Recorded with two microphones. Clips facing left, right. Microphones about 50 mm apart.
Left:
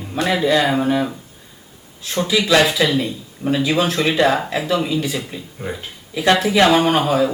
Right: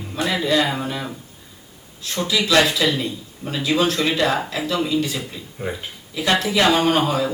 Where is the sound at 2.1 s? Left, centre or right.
Centre.